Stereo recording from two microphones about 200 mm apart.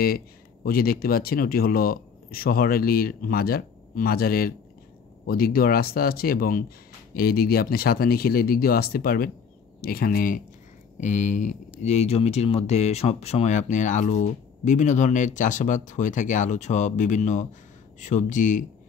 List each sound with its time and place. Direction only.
0.7 s speech: 50° left (ahead or behind)